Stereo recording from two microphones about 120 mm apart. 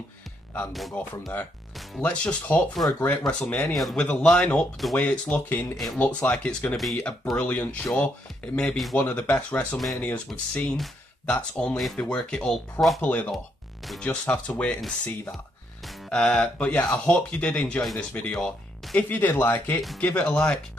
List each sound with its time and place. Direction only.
2.0 s speech: 10° left (ahead or behind)
8.9 s speech: 15° left (ahead or behind)
16.1 s speech: 10° left (ahead or behind)
18.9 s speech: 15° left (ahead or behind)